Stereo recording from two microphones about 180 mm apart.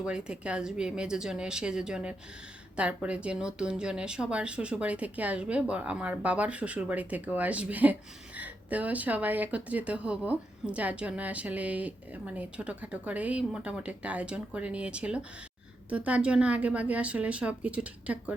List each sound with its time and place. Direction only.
0.0 s speech: 5° right (ahead or behind)